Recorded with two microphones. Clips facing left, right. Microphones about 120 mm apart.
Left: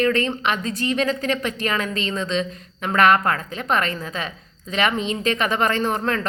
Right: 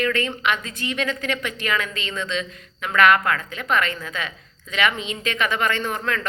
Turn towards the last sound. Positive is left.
turn(degrees=35)  # may be behind; listen again after turning